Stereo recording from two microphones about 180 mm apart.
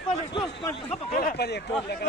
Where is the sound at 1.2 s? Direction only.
60° left (ahead or behind).